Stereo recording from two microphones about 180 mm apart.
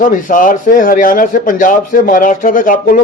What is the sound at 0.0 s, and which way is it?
Speech, 50° left (ahead or behind).